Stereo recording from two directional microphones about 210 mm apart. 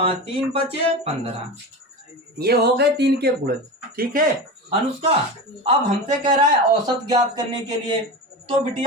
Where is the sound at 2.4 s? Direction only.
50° right (ahead or behind).